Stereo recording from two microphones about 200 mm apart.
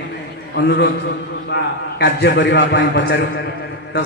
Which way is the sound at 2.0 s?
60° left (ahead or behind).